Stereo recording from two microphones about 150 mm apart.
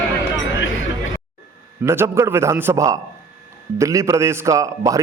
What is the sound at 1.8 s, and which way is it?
A man's voice, 20° right (ahead or behind).